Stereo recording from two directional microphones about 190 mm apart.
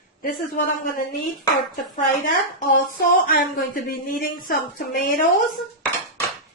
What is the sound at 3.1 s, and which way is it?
A woman's voice, 50° left (ahead or behind).